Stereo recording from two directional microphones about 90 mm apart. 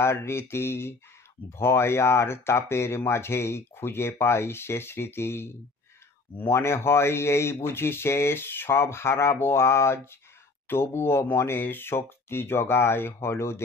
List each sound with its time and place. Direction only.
0.0 s speech: 30° left (ahead or behind)